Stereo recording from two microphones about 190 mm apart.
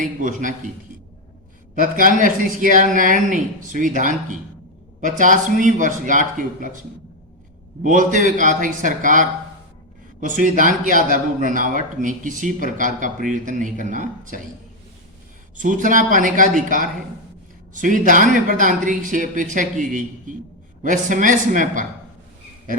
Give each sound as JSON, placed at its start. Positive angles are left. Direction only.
{"t": 0.0, "sound": "speech", "side_deg": -45}
{"t": 1.7, "sound": "speech", "side_deg": -45}
{"t": 7.9, "sound": "speech", "side_deg": -45}
{"t": 15.5, "sound": "speech", "side_deg": -45}